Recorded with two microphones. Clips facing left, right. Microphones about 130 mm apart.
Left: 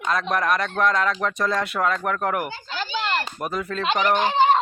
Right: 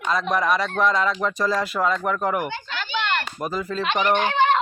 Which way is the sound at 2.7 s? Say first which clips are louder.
Left 1 dB; 35° left (ahead or behind).